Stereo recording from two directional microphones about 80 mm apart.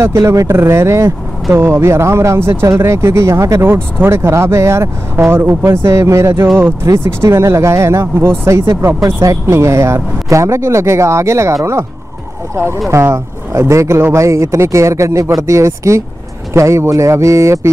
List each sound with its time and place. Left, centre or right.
0.0 s speech: right
3.6 s speech: right
12.5 s speech: right